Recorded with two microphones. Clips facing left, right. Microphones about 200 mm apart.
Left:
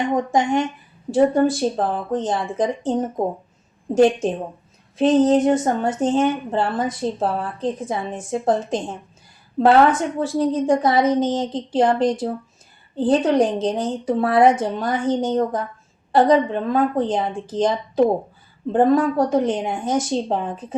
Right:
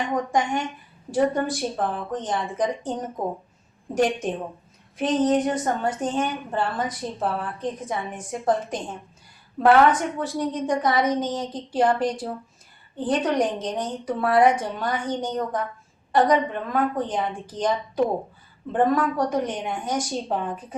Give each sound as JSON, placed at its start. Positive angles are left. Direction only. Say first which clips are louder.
{"t": 0.1, "sound": "a woman's voice", "louder": "left 3 dB", "side_deg": 25}
{"t": 3.9, "sound": "a woman's voice", "louder": "left 7 dB", "side_deg": 25}